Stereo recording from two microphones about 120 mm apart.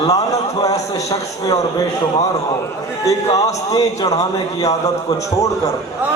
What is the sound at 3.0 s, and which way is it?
A man's voice, 30° left (ahead or behind).